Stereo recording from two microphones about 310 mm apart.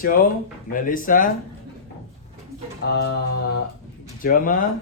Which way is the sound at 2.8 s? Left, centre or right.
Left.